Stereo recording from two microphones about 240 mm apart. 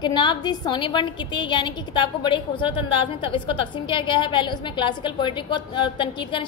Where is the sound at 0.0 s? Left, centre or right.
Centre.